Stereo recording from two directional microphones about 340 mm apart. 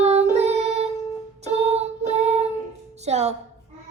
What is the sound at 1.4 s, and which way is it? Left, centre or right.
Child singing, centre.